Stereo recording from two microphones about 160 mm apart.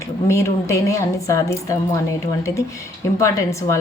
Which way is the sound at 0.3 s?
15° left (ahead or behind).